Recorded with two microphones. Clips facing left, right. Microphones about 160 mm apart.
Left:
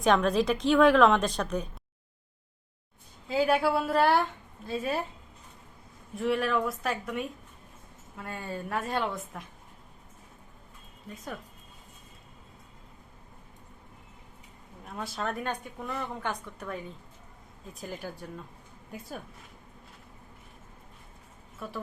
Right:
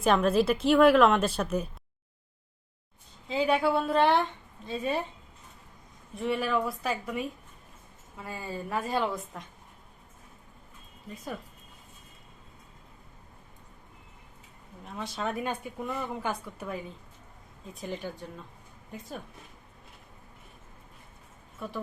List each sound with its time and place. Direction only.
0.0 s speech: 5° right (ahead or behind)
3.2 s speech: 5° left (ahead or behind)
6.1 s speech: centre (ahead or behind)
14.8 s speech: centre (ahead or behind)
21.6 s speech: centre (ahead or behind)